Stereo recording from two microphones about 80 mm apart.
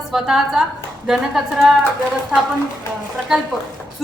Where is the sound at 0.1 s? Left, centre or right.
Centre.